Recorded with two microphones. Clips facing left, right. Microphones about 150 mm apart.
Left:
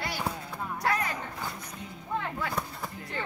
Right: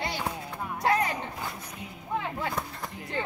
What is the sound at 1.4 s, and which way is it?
Speech, 10° right (ahead or behind).